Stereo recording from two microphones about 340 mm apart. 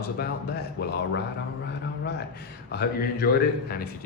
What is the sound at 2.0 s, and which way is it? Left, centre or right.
Speech, left.